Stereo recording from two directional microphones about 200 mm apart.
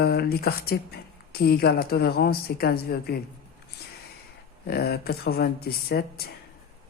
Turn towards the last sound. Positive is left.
turn(degrees=50)  # may be behind; listen again after turning